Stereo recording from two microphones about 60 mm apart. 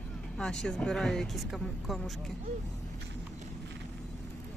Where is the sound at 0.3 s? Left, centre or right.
Centre.